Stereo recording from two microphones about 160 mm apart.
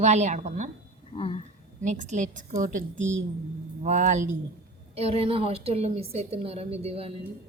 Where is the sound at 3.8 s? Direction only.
50° right (ahead or behind).